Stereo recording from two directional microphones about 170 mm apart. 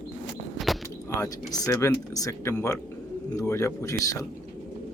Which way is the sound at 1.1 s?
20° left (ahead or behind).